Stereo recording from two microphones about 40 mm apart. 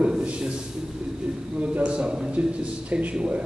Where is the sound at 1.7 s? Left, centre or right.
Right.